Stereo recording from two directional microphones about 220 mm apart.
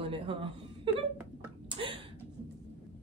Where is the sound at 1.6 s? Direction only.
25° right (ahead or behind).